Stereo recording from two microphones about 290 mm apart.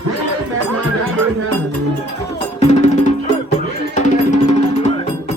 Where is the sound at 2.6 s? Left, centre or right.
Left.